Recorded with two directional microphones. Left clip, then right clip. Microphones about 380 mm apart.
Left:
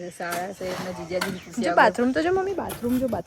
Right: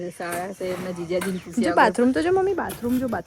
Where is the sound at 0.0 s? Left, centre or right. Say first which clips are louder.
Right 1 dB; right.